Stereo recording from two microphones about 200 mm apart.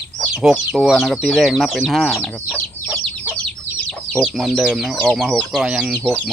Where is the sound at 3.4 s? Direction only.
5° left (ahead or behind).